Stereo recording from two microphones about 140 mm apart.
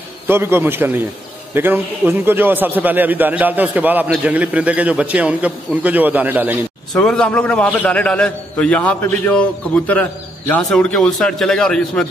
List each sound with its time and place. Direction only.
0.3 s a man's voice: 15° right (ahead or behind)
6.9 s a man's voice: 5° left (ahead or behind)